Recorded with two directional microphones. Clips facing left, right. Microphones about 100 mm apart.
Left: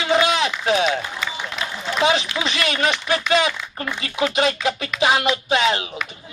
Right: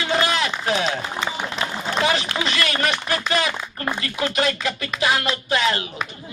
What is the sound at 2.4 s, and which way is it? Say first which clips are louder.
Speech: left 1 dB; 20° left (ahead or behind).